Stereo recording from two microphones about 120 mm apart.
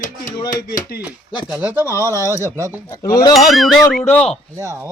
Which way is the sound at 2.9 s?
30° left (ahead or behind).